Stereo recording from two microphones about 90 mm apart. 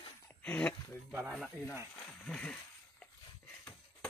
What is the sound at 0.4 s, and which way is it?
Speech, 15° left (ahead or behind).